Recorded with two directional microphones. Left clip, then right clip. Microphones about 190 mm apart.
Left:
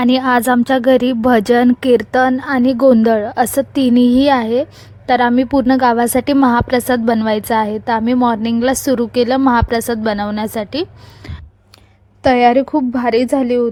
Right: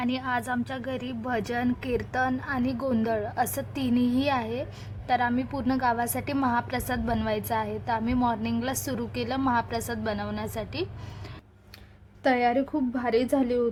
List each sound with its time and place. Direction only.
0.0 s a woman's voice: 50° left (ahead or behind)
12.2 s a woman's voice: 40° left (ahead or behind)